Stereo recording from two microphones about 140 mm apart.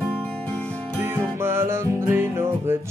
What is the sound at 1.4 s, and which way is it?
Music, 15° right (ahead or behind).